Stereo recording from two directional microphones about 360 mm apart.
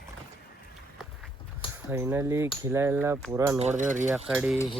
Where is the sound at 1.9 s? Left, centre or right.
Centre.